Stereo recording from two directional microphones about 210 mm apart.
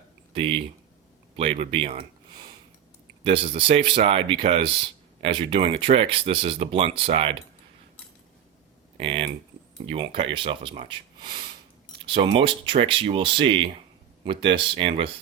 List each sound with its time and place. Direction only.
0.3 s speech: 25° right (ahead or behind)
3.2 s speech: 25° right (ahead or behind)
9.0 s speech: 25° right (ahead or behind)